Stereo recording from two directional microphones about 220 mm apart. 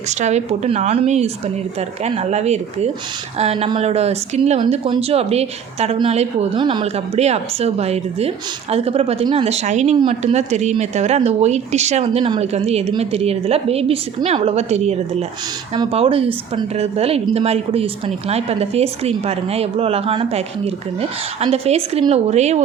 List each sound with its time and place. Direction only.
0.1 s speech: 30° right (ahead or behind)